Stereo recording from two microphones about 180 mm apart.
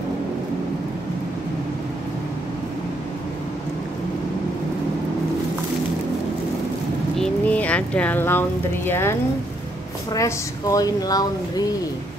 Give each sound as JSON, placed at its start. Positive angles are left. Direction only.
{"t": 7.2, "sound": "speech", "side_deg": 10}
{"t": 10.1, "sound": "speech", "side_deg": 20}